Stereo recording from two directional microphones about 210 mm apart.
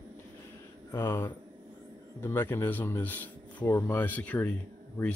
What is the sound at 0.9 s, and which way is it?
Speech, 10° left (ahead or behind).